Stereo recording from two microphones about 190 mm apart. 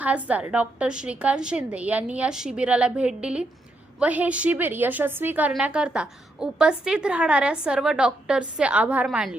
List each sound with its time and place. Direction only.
0.0 s a woman's voice: 10° right (ahead or behind)